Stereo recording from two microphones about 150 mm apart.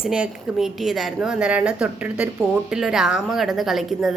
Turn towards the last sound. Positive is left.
turn(degrees=0)  # may be behind; listen again after turning